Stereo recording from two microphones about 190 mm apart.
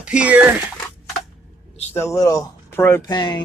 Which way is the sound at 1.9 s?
15° left (ahead or behind).